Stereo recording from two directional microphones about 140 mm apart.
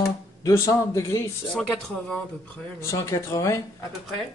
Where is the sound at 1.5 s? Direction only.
5° left (ahead or behind).